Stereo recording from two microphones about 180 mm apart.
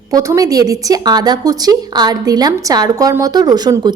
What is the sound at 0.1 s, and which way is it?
A woman's voice, 20° right (ahead or behind).